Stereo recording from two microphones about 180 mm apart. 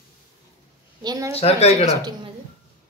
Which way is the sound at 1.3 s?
35° left (ahead or behind).